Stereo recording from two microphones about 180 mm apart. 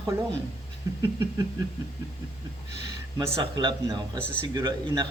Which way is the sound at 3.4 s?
25° right (ahead or behind).